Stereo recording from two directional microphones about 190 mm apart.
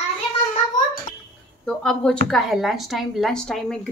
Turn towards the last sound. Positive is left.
turn(degrees=5)  # may be behind; listen again after turning